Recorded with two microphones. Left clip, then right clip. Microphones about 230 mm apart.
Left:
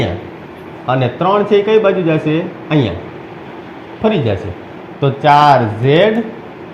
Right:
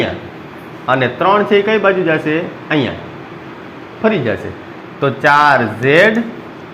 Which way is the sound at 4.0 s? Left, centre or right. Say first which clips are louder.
Even; right.